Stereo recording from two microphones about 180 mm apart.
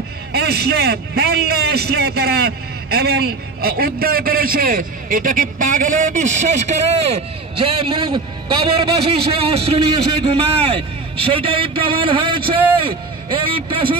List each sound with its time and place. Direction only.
0.3 s a man's voice: 60° right (ahead or behind); by 13.9 s 30° right (ahead or behind)